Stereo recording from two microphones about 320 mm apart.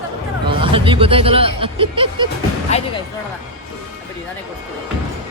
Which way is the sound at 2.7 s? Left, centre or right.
Left.